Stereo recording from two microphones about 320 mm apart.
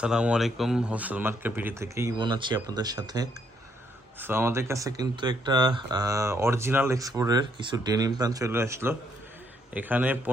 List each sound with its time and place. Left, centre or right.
0.0 s a man's voice: centre